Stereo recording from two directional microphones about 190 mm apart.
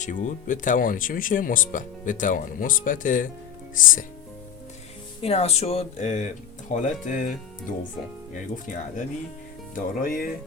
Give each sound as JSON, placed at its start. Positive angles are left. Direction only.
{"t": 0.0, "sound": "speech", "side_deg": 40}
{"t": 5.2, "sound": "speech", "side_deg": 30}